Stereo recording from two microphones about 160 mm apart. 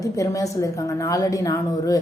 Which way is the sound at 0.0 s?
20° left (ahead or behind).